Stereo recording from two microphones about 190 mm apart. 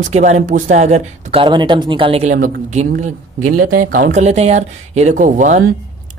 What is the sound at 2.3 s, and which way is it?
A man's voice, 45° right (ahead or behind).